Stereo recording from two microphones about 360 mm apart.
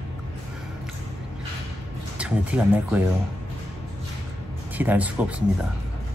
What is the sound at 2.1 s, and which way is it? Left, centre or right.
Speech, centre.